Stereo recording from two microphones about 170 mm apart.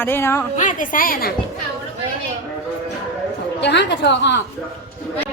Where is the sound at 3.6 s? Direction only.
90° left.